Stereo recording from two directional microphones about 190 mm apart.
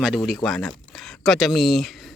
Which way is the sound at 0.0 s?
Centre (ahead or behind).